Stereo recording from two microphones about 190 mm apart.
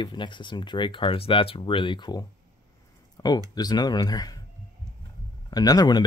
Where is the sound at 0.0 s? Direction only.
25° left (ahead or behind).